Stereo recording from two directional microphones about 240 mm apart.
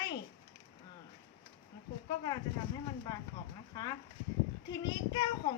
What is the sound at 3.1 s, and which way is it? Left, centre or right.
Speech, centre.